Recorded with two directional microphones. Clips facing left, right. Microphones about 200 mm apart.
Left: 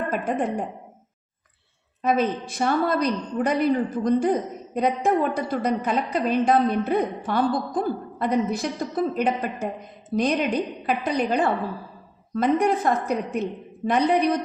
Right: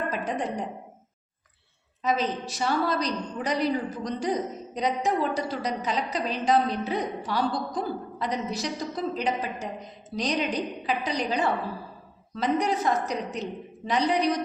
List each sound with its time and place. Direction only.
0.1 s a woman's voice: 55° left (ahead or behind)
2.0 s a woman's voice: 55° left (ahead or behind)